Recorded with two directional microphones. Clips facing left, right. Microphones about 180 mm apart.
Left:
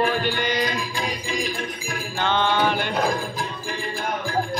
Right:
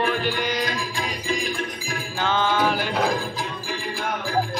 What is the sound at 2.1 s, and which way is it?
Mantra, 5° right (ahead or behind).